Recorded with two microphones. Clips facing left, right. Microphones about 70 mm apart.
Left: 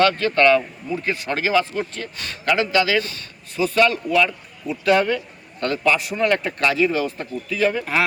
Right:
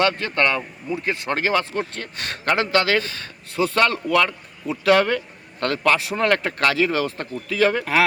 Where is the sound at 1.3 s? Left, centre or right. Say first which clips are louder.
Left 2 dB; right.